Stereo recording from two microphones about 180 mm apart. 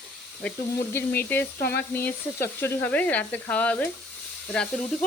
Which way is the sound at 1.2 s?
10° left (ahead or behind).